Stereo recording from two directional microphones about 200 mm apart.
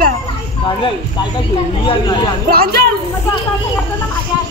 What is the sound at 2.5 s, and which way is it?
Speech, 50° right (ahead or behind).